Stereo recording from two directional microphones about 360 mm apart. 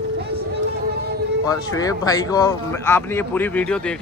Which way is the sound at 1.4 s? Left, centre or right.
Centre.